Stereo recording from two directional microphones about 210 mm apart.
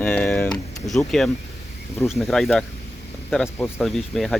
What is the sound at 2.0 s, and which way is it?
Speech, centre (ahead or behind).